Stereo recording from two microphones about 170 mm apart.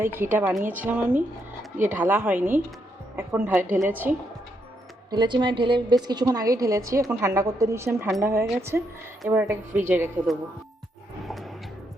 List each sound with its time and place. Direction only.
0.0 s a woman's voice: 15° right (ahead or behind)
5.1 s a woman's voice: 25° right (ahead or behind)
11.3 s a sound: centre (ahead or behind)